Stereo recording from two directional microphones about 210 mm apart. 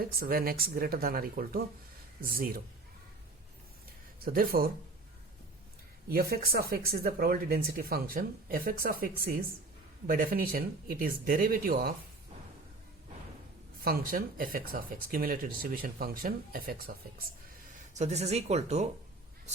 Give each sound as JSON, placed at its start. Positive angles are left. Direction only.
{"t": 0.2, "sound": "speech", "side_deg": -45}
{"t": 4.2, "sound": "speech", "side_deg": -45}
{"t": 6.1, "sound": "speech", "side_deg": -45}
{"t": 13.8, "sound": "speech", "side_deg": -45}
{"t": 17.9, "sound": "speech", "side_deg": -30}